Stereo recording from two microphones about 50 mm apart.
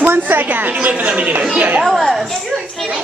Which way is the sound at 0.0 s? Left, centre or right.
Right.